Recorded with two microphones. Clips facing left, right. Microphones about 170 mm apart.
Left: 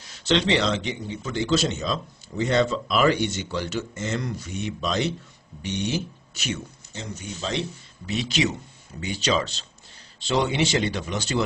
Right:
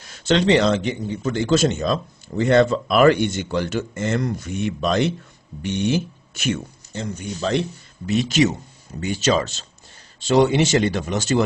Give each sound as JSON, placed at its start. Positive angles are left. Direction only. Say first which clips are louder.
{"t": 0.0, "sound": "a man's voice", "louder": "right 4 dB", "side_deg": -50}